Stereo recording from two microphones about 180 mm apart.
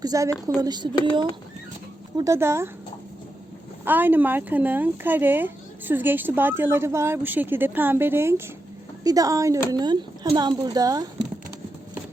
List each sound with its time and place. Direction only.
0.0 s a woman's voice: 20° right (ahead or behind)
3.8 s a woman's voice: 10° right (ahead or behind)